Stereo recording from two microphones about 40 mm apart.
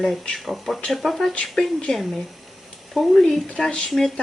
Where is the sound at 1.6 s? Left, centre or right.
Centre.